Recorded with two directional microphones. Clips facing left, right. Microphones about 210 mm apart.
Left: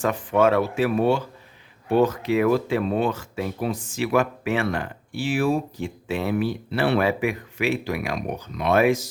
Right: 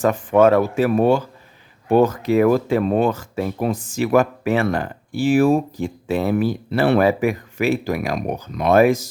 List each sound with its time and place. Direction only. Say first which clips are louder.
0.0 s speech: right 5 dB; 45° right (ahead or behind)